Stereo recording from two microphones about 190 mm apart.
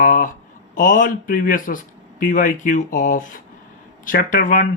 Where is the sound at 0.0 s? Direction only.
45° left (ahead or behind).